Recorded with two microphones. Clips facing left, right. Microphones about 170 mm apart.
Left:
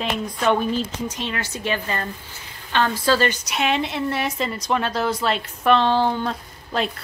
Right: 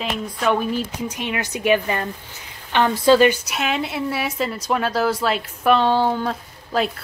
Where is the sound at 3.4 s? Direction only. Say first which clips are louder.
Left 1 dB; centre (ahead or behind).